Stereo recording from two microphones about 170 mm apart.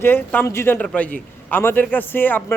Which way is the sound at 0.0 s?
10° left (ahead or behind).